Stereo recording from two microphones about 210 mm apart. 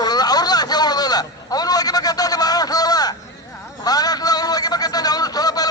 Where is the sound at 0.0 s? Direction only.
20° left (ahead or behind).